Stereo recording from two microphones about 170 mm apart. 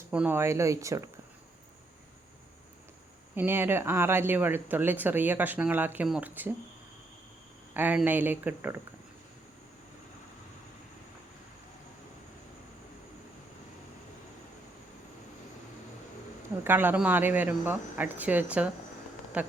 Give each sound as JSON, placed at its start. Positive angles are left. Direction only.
{"t": 0.1, "sound": "speech", "side_deg": -10}
{"t": 3.3, "sound": "speech", "side_deg": -10}
{"t": 7.7, "sound": "speech", "side_deg": -10}
{"t": 16.6, "sound": "speech", "side_deg": -10}